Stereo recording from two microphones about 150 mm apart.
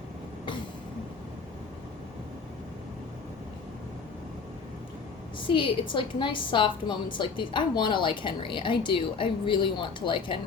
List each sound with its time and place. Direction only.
5.5 s a woman's voice: 35° left (ahead or behind)